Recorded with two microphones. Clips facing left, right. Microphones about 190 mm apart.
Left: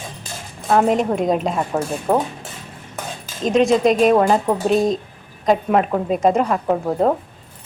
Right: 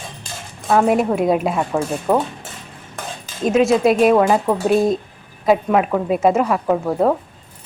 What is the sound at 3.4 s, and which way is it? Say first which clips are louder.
Speech: right 1 dB; 5° right (ahead or behind).